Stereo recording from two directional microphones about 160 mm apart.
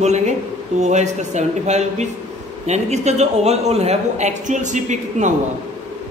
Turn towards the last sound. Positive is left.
turn(degrees=-50)  # may be behind; listen again after turning